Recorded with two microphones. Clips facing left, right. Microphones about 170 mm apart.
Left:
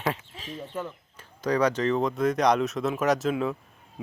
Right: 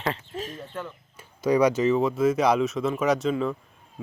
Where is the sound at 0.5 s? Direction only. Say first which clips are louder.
Left 2 dB; 10° left (ahead or behind).